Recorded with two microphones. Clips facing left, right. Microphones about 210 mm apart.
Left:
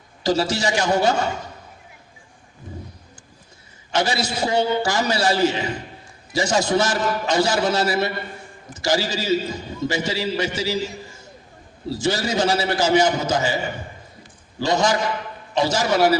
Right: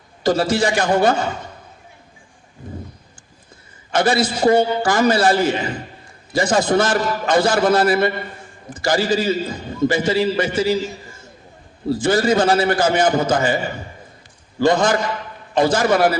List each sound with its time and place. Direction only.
0.2 s a man's voice: 55° right (ahead or behind)
3.9 s a man's voice: 55° right (ahead or behind)
11.9 s a man's voice: 55° right (ahead or behind)
14.6 s a man's voice: 55° right (ahead or behind)